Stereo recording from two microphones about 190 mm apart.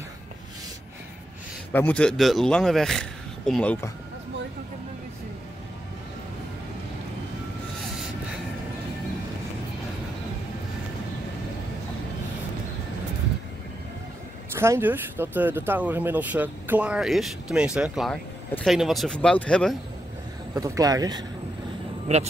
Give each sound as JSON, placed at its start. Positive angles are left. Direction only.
{"t": 1.7, "sound": "speech", "side_deg": 10}
{"t": 14.5, "sound": "speech", "side_deg": -15}
{"t": 20.5, "sound": "speech", "side_deg": -15}